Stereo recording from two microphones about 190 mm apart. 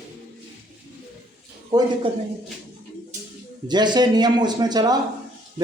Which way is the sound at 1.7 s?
20° right (ahead or behind).